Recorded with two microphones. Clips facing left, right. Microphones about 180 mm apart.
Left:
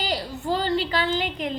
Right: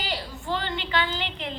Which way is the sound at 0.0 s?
40° left (ahead or behind).